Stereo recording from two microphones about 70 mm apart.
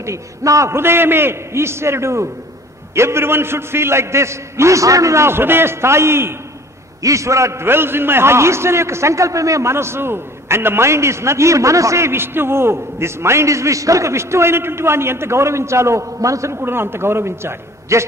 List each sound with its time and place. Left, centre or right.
0.0 s a man's voice: right
7.0 s a man's voice: right